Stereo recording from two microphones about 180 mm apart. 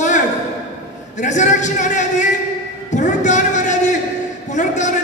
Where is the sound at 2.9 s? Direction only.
45° left (ahead or behind).